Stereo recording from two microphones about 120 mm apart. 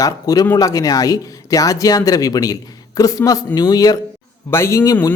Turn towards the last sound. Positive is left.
turn(degrees=25)  # may be behind; listen again after turning